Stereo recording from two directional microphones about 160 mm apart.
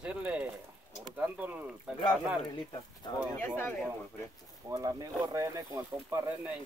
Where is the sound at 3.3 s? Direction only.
15° left (ahead or behind).